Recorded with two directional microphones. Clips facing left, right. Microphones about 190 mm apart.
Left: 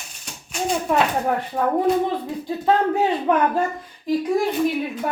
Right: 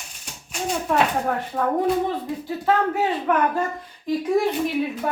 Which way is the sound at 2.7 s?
20° left (ahead or behind).